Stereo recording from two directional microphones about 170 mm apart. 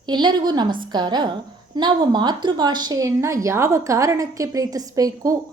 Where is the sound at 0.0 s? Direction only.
25° right (ahead or behind).